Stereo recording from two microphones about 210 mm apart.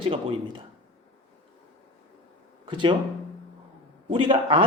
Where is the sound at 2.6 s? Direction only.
25° right (ahead or behind).